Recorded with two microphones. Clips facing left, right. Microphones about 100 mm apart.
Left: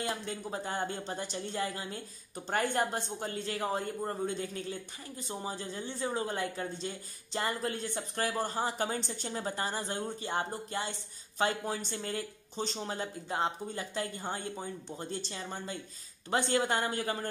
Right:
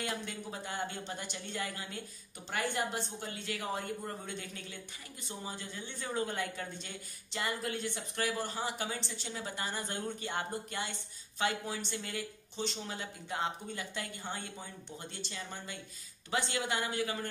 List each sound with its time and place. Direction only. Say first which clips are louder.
0.0 s a woman's voice: left 3 dB; 30° left (ahead or behind)
2.5 s a woman's voice: left 4 dB; 45° left (ahead or behind)